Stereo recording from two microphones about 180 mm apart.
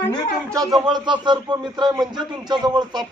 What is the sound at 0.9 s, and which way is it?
Speech, 25° right (ahead or behind).